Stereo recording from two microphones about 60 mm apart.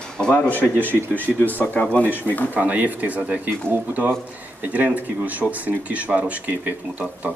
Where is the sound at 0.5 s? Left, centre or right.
Left.